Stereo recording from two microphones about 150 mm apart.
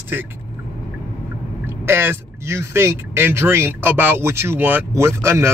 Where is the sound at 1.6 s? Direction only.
15° right (ahead or behind).